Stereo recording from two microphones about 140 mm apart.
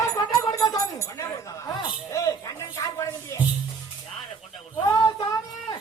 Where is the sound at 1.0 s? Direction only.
20° left (ahead or behind).